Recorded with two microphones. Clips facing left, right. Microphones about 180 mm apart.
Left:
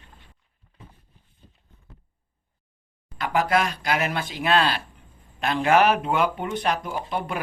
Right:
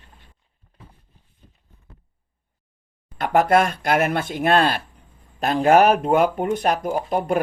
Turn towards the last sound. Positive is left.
turn(degrees=-45)  # may be behind; listen again after turning